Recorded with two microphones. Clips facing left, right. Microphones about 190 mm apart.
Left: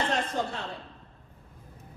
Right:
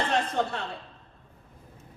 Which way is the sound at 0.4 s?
65° right (ahead or behind).